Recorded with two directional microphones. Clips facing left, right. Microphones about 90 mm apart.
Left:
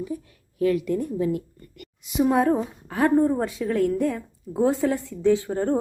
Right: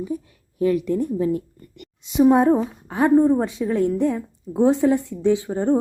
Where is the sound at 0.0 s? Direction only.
25° right (ahead or behind).